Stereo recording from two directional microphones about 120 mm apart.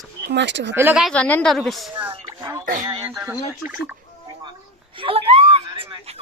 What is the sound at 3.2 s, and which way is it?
Speech, 15° right (ahead or behind).